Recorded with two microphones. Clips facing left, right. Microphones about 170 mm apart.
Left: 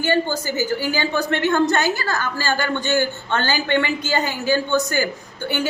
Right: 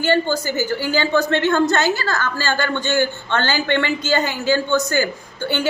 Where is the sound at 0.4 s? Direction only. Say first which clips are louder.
Right 1 dB; 20° right (ahead or behind).